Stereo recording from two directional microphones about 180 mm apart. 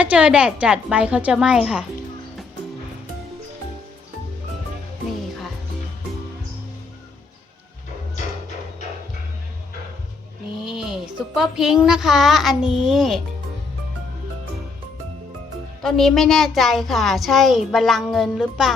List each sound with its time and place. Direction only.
0.0 s a woman's voice: 5° right (ahead or behind)
10.6 s speech: 5° right (ahead or behind)
15.8 s a woman's voice: centre (ahead or behind)